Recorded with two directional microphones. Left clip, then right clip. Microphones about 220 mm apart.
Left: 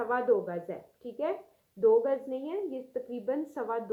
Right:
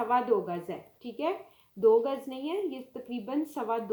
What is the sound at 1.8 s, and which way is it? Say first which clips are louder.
Speech: right 1 dB; 40° right (ahead or behind).